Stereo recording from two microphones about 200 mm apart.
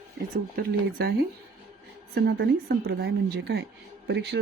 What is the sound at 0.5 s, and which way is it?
Speech, 50° right (ahead or behind).